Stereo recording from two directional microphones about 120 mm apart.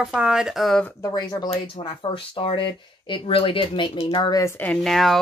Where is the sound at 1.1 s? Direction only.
35° left (ahead or behind).